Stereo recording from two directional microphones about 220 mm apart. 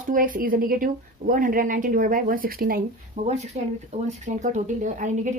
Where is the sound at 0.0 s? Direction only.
40° right (ahead or behind).